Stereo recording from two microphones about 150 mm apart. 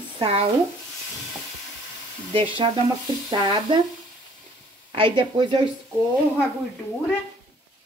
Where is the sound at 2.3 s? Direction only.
35° right (ahead or behind).